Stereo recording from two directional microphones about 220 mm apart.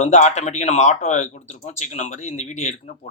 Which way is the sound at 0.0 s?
30° left (ahead or behind).